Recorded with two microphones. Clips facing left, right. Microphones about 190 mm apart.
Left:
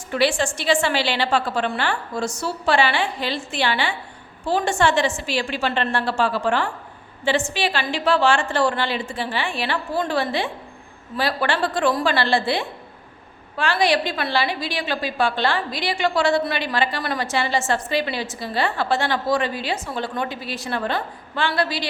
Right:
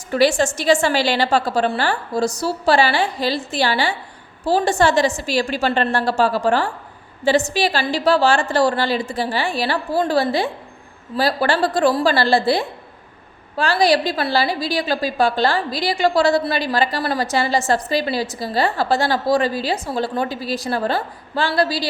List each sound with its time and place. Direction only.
0.1 s a woman's voice: 40° right (ahead or behind)